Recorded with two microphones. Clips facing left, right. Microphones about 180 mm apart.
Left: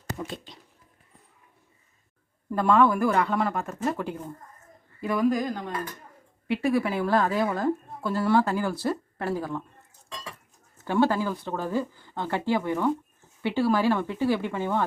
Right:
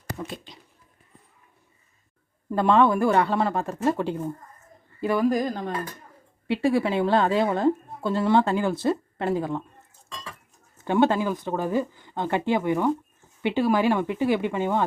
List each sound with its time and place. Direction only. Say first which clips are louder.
0.3 s speech: even; centre (ahead or behind)
2.5 s a woman's voice: right 2 dB; 25° right (ahead or behind)
10.8 s speech: right 2 dB; 20° right (ahead or behind)